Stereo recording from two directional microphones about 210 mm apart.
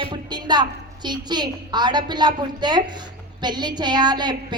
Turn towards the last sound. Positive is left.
turn(degrees=-20)  # may be behind; listen again after turning